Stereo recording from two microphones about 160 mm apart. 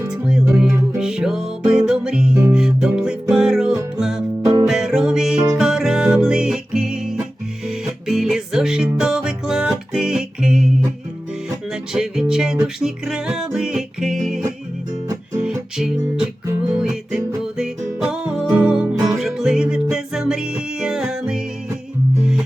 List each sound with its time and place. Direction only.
0.1 s music: 5° right (ahead or behind)
15.8 s music: 5° right (ahead or behind)